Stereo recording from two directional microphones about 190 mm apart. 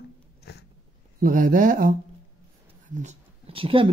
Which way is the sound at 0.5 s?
60° left (ahead or behind).